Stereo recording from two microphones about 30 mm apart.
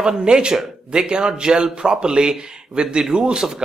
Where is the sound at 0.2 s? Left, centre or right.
Right.